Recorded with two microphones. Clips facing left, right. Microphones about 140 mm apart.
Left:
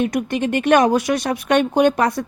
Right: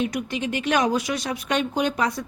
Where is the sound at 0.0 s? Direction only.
50° left (ahead or behind).